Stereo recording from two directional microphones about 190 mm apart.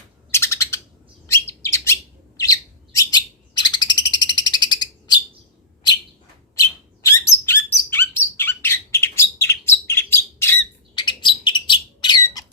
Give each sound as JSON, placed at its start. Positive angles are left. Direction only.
{"t": 0.3, "sound": "bird", "side_deg": 15}
{"t": 6.6, "sound": "bird", "side_deg": 15}
{"t": 10.9, "sound": "bird", "side_deg": 25}